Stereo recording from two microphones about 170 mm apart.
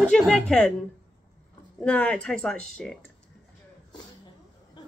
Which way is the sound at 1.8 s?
5° left (ahead or behind).